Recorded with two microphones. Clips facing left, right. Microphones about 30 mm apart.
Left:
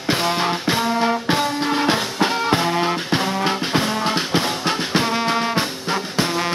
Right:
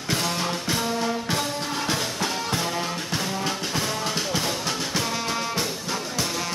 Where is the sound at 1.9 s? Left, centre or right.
Left.